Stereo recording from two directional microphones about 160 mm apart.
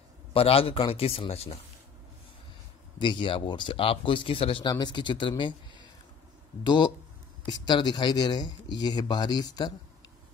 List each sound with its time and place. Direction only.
0.3 s speech: 35° left (ahead or behind)
3.0 s speech: 30° left (ahead or behind)
6.6 s speech: 25° left (ahead or behind)